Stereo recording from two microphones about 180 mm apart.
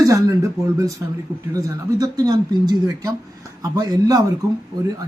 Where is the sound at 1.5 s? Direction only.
20° right (ahead or behind).